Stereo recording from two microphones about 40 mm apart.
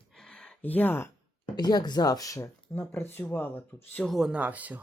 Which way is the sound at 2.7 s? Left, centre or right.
Left.